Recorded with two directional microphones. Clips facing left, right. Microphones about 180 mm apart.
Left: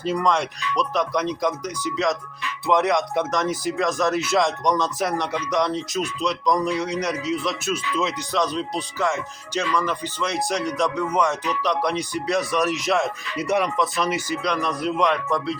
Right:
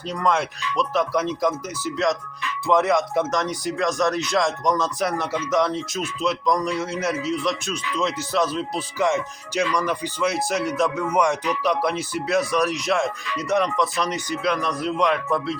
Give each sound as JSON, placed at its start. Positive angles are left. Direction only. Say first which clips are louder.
{"t": 0.0, "sound": "speech", "louder": "left 1 dB", "side_deg": 0}
{"t": 9.0, "sound": "speech", "louder": "right 4 dB", "side_deg": -15}